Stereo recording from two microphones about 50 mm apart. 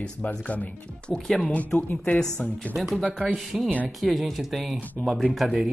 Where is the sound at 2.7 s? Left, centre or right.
Centre.